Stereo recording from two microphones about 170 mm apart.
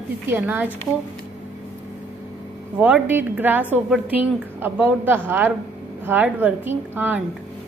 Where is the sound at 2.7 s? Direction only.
10° right (ahead or behind).